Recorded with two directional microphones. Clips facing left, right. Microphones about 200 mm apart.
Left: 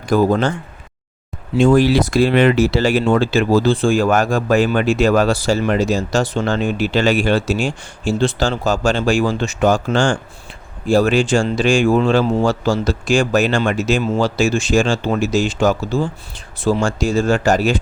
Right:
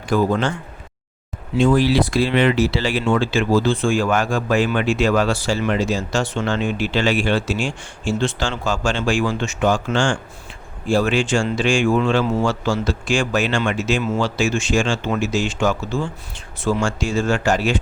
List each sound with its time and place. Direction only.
0.1 s speech: 40° left (ahead or behind)
1.5 s speech: 45° left (ahead or behind)